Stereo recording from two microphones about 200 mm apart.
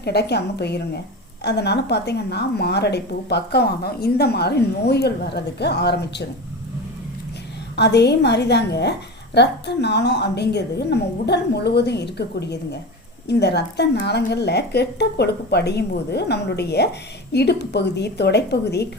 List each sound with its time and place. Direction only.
0.0 s a woman's voice: 55° left (ahead or behind)
7.8 s a woman's voice: 55° left (ahead or behind)